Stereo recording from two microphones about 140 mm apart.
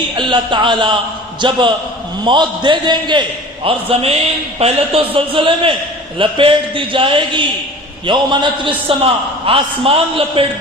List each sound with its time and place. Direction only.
0.2 s a man's voice: 35° right (ahead or behind)